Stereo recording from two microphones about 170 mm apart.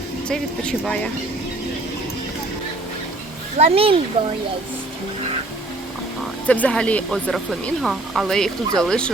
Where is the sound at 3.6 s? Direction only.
35° right (ahead or behind).